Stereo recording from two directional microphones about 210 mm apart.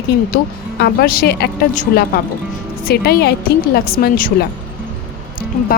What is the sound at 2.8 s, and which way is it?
A woman's voice, 50° left (ahead or behind).